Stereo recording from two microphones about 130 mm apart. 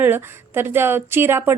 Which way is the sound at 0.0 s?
15° right (ahead or behind).